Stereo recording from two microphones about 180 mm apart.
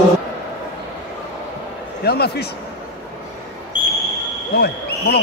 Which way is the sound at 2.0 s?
60° left (ahead or behind).